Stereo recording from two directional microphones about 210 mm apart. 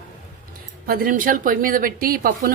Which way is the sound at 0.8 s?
45° right (ahead or behind).